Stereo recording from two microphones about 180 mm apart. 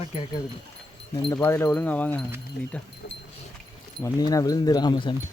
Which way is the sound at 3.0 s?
60° left (ahead or behind).